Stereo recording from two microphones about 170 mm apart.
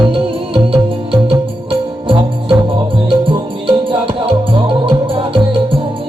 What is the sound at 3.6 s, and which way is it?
Music, 30° right (ahead or behind).